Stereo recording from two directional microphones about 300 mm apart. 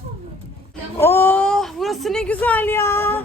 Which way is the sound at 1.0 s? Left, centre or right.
Centre.